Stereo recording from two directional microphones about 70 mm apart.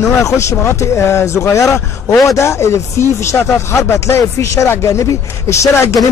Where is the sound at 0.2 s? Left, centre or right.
Left.